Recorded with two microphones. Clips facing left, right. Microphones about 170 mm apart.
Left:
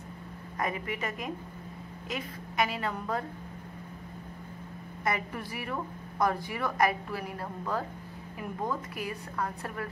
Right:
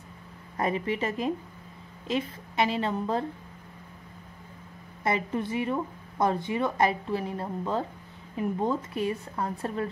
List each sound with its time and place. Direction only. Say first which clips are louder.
0.6 s a woman's voice: right 5 dB; 30° right (ahead or behind)
5.0 s a woman's voice: right 5 dB; 25° right (ahead or behind)